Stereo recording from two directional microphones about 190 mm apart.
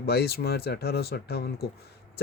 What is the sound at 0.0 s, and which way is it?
Speech, 55° left (ahead or behind).